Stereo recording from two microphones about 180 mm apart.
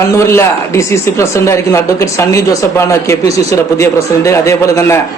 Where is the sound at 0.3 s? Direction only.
15° left (ahead or behind).